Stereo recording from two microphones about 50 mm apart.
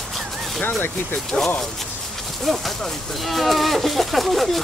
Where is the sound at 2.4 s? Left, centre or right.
Centre.